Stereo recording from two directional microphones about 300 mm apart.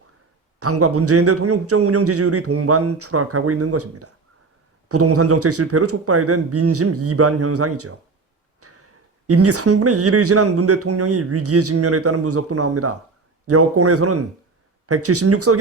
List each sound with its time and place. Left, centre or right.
0.6 s speech: right